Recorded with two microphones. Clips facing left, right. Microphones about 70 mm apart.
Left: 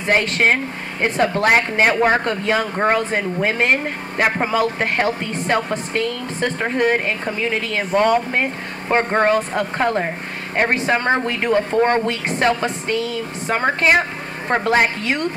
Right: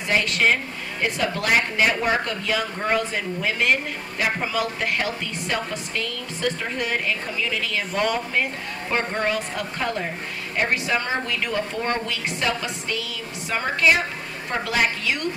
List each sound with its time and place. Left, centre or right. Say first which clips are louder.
0.0 s speech: left 4 dB; left